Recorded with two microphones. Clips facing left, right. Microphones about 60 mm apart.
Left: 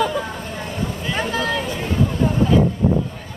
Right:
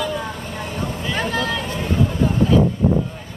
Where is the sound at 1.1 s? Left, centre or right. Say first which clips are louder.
Even; centre.